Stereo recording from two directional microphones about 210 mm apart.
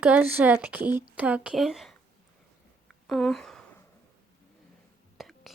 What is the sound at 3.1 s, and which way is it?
Speech, centre (ahead or behind).